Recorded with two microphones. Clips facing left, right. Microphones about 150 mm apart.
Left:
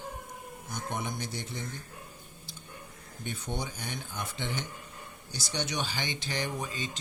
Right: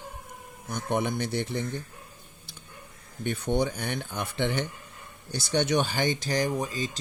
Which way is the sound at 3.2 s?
60° right (ahead or behind).